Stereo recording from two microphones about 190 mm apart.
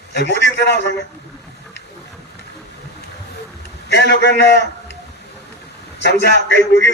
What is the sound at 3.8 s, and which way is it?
Speech, 65° left (ahead or behind).